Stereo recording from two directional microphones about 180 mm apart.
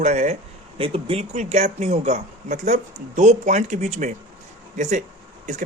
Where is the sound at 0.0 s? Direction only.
40° right (ahead or behind).